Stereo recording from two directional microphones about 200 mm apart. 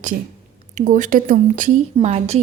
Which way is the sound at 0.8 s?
40° right (ahead or behind).